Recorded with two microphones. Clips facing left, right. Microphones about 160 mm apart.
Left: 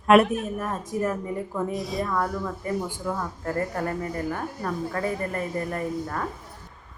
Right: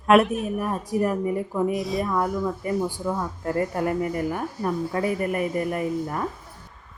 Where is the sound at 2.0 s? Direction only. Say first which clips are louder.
Right 3 dB; 15° right (ahead or behind).